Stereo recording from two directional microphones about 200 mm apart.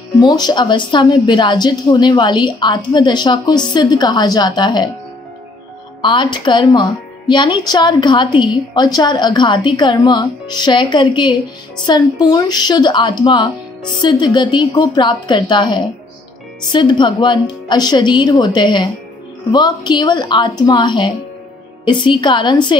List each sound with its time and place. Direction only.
0.2 s speech: 20° left (ahead or behind)
6.0 s speech: 25° left (ahead or behind)